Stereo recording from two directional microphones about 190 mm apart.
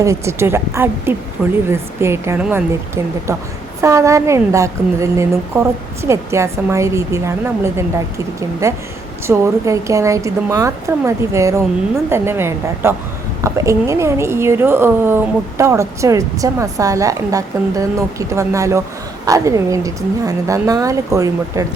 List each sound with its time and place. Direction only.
0.0 s a woman's voice: 15° right (ahead or behind)
1.4 s speech: centre (ahead or behind)
1.7 s a woman's voice: 15° right (ahead or behind)